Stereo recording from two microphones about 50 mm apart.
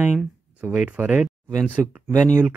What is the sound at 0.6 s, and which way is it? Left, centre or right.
Speech, right.